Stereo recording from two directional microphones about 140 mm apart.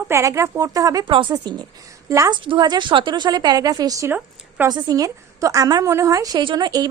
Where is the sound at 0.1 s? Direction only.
20° right (ahead or behind).